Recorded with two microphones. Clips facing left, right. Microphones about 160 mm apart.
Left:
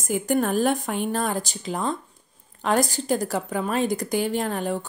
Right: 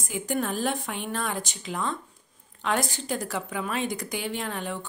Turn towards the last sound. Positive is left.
turn(degrees=40)  # may be behind; listen again after turning